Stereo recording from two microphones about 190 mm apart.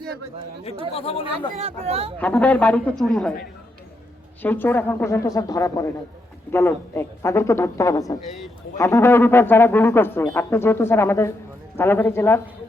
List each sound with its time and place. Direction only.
0.6 s speech: 30° left (ahead or behind)
1.5 s speech: 35° right (ahead or behind)
2.1 s speech: 5° left (ahead or behind)
4.4 s speech: 10° left (ahead or behind)